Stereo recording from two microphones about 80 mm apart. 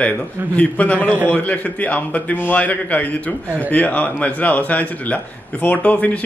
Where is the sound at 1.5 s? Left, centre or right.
Centre.